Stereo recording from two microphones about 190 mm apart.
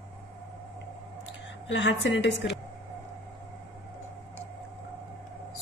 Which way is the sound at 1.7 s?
70° left (ahead or behind).